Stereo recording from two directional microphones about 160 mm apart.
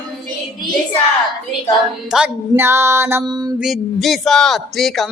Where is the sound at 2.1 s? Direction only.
10° right (ahead or behind).